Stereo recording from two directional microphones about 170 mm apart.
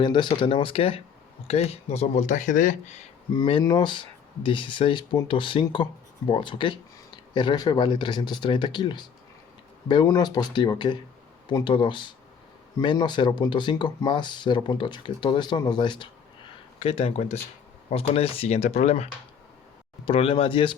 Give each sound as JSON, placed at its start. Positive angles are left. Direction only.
{"t": 0.0, "sound": "speech", "side_deg": 25}
{"t": 3.3, "sound": "speech", "side_deg": 30}
{"t": 20.1, "sound": "speech", "side_deg": 30}